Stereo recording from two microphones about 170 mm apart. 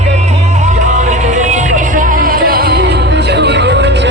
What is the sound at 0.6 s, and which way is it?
Music, 45° right (ahead or behind).